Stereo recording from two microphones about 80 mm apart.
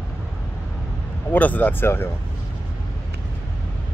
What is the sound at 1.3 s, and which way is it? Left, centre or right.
Speech, left.